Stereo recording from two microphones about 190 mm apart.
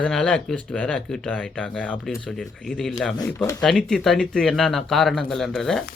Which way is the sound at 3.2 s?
10° left (ahead or behind).